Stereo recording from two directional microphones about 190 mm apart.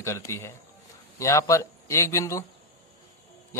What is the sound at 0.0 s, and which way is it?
Speech, 15° left (ahead or behind).